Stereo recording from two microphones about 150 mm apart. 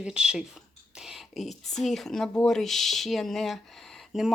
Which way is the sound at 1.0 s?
Centre (ahead or behind).